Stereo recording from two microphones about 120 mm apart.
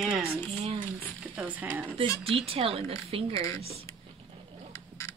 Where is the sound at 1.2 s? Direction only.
15° right (ahead or behind).